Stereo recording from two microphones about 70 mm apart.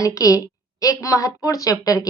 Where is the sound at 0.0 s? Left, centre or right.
Left.